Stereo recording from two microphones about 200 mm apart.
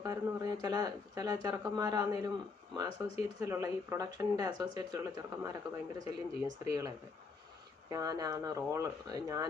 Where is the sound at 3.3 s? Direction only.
15° right (ahead or behind).